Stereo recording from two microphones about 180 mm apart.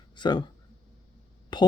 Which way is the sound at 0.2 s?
25° left (ahead or behind).